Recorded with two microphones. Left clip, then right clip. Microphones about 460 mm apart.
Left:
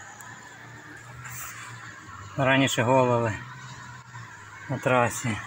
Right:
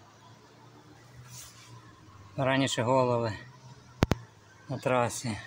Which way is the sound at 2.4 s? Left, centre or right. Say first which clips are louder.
Left 5 dB; right.